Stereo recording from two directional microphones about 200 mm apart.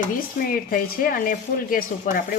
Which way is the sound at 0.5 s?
45° left (ahead or behind).